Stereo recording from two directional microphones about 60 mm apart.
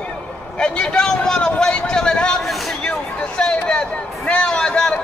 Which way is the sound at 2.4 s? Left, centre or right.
Centre.